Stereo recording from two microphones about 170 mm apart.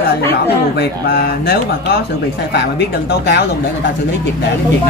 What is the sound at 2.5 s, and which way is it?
Speech, 70° left (ahead or behind).